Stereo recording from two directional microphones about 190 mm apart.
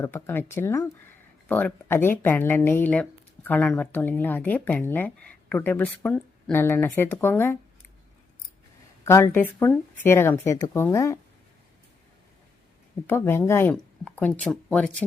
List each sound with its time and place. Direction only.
0.0 s speech: 10° left (ahead or behind)
9.0 s speech: 15° left (ahead or behind)
13.1 s speech: 10° left (ahead or behind)